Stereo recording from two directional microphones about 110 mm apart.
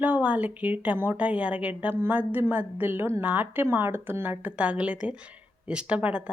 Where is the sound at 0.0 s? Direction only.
15° right (ahead or behind).